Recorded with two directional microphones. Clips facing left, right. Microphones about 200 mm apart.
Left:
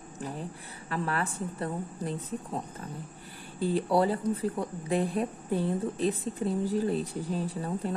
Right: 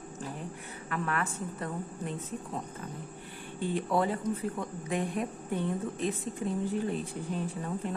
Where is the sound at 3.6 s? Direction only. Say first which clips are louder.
Left 4 dB; 35° left (ahead or behind).